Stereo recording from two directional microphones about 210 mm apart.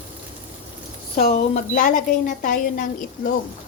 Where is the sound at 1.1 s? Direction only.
35° left (ahead or behind).